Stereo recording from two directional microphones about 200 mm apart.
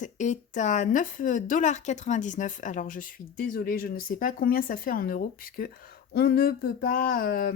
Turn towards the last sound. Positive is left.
turn(degrees=45)  # may be behind; listen again after turning